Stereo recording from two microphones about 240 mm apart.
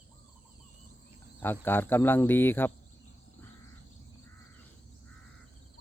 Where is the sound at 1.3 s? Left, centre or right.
Centre.